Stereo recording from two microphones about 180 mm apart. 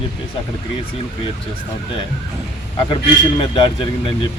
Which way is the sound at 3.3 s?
25° left (ahead or behind).